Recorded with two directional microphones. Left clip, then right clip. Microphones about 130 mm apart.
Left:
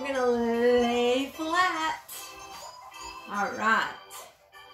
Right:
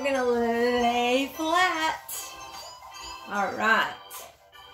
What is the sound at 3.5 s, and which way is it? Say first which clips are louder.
Speech: right 2 dB; 15° right (ahead or behind).